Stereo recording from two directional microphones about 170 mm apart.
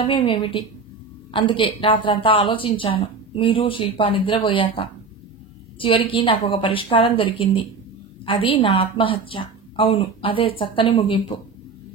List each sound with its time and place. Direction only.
0.0 s a woman's voice: 30° left (ahead or behind)